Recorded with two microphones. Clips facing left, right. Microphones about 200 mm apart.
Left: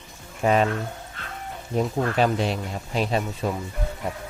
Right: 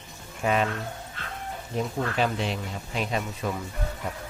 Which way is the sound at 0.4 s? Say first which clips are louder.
Left 5 dB; 40° left (ahead or behind).